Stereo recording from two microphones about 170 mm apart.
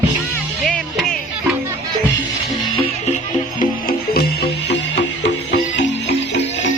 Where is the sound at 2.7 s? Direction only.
35° left (ahead or behind).